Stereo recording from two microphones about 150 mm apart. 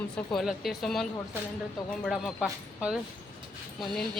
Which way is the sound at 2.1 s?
Centre (ahead or behind).